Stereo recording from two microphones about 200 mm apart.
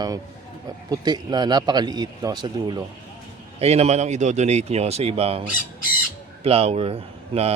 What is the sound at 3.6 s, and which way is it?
A man's voice, 30° right (ahead or behind).